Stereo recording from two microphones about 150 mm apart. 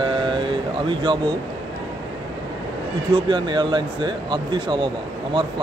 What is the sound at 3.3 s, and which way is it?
Speech, 30° right (ahead or behind).